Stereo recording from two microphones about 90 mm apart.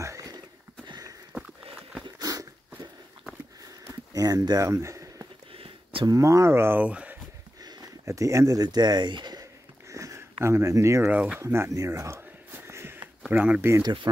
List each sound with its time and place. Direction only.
0.0 s a sound: 40° right (ahead or behind)
0.8 s sniff: 45° right (ahead or behind)
1.8 s dog: 5° right (ahead or behind)
2.0 s dog: 45° right (ahead or behind)
3.9 s a sound: 45° right (ahead or behind)
5.5 s a sound: 90° right
6.0 s speech: 35° right (ahead or behind); by 7.2 s 15° right (ahead or behind)
8.0 s speech: 35° right (ahead or behind); by 9.4 s 55° right (ahead or behind)
9.4 s sniff: 35° right (ahead or behind)
10.4 s speech: 35° right (ahead or behind)
11.1 s speech: 15° right (ahead or behind)
11.3 s speech: 30° right (ahead or behind)
12.4 s a sound: 25° right (ahead or behind)
13.3 s speech: 20° right (ahead or behind)